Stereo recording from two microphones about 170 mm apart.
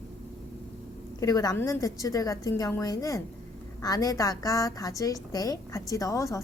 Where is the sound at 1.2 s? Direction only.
20° left (ahead or behind).